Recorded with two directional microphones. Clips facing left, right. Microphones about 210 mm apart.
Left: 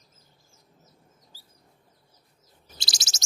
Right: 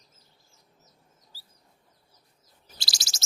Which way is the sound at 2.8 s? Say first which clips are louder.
Left 1 dB; 20° left (ahead or behind).